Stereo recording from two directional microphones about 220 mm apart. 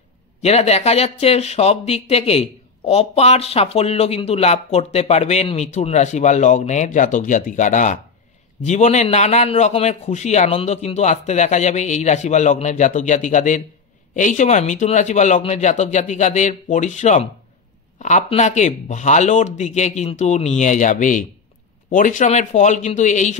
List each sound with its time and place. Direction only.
0.4 s a man's voice: 30° left (ahead or behind)